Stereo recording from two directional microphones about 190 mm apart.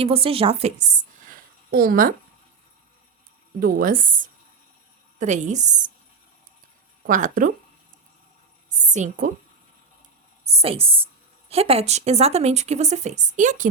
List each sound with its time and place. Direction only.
0.0 s speech: 30° right (ahead or behind)
1.3 s a sound: 50° right (ahead or behind)
3.6 s speech: 50° right (ahead or behind)
7.1 s speech: 45° right (ahead or behind)
8.9 s speech: 40° right (ahead or behind)
10.4 s a woman's voice: 30° right (ahead or behind)